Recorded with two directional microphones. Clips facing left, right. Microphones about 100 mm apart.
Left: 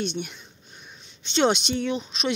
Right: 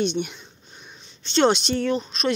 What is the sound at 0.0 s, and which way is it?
Speech, centre (ahead or behind).